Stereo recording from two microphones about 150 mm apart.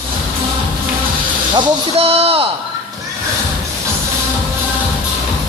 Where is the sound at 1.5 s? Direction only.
40° right (ahead or behind).